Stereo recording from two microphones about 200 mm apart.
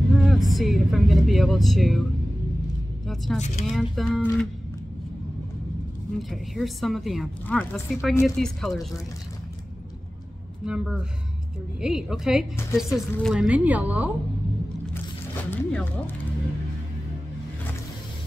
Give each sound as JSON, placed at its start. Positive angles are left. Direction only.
{"t": 0.2, "sound": "speech", "side_deg": 0}
{"t": 3.3, "sound": "speech", "side_deg": 35}
{"t": 3.6, "sound": "a woman's voice", "side_deg": 0}
{"t": 6.1, "sound": "a woman's voice", "side_deg": 0}
{"t": 10.6, "sound": "a woman's voice", "side_deg": -5}
{"t": 15.5, "sound": "speech", "side_deg": 10}